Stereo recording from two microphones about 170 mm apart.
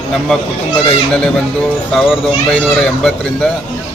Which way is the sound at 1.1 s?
5° left (ahead or behind).